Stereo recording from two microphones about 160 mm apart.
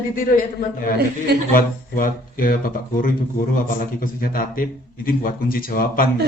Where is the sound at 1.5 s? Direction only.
60° left (ahead or behind).